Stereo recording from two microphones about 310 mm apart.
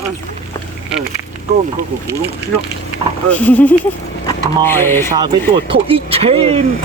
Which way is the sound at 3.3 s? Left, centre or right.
Centre.